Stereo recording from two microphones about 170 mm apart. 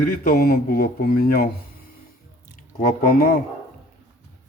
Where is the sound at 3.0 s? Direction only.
60° left (ahead or behind).